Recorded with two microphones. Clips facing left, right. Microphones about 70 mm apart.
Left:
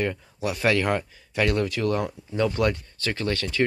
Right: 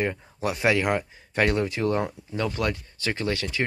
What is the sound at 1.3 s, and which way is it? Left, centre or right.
Speech, right.